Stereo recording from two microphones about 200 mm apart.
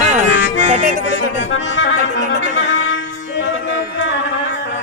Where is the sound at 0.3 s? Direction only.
70° left (ahead or behind).